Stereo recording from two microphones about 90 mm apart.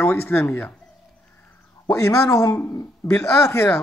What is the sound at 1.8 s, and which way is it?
Speech, 35° left (ahead or behind).